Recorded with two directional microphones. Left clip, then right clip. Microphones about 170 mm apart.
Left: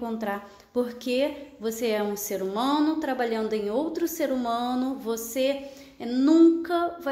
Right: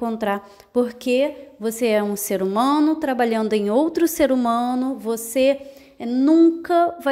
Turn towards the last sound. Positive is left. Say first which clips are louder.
# right 8 dB
turn(degrees=-40)  # may be behind; listen again after turning